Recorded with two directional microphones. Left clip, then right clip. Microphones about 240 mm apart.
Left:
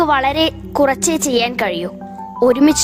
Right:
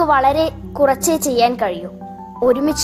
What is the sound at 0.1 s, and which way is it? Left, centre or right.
A woman's voice, left.